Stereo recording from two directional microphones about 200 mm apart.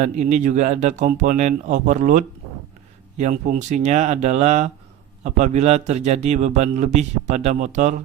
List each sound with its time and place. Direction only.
0.0 s a man's voice: 35° right (ahead or behind)